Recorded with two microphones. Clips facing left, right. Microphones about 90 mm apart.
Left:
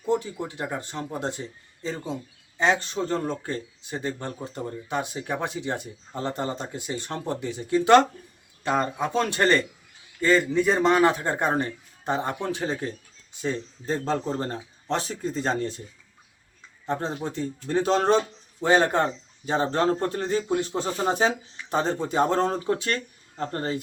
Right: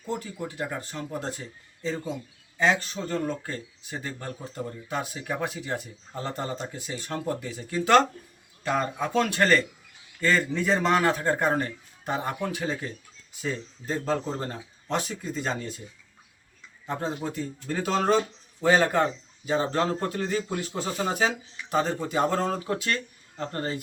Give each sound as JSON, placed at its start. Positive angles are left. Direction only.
{"t": 0.0, "sound": "speech", "side_deg": 25}
{"t": 16.8, "sound": "speech", "side_deg": 30}